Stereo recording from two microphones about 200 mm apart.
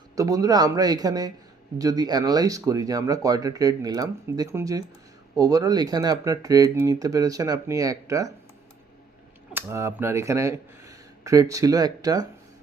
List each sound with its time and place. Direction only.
0.2 s a man's voice: 15° right (ahead or behind)
9.5 s speech: 10° right (ahead or behind)